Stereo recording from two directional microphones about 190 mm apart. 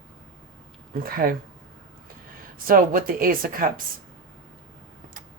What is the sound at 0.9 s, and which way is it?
Speech, 50° right (ahead or behind).